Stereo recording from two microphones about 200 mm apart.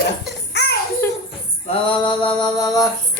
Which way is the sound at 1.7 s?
25° left (ahead or behind).